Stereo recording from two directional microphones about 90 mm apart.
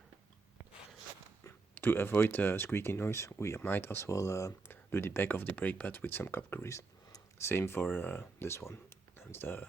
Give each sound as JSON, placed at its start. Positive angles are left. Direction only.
{"t": 1.5, "sound": "speech", "side_deg": 25}
{"t": 4.7, "sound": "speech", "side_deg": 25}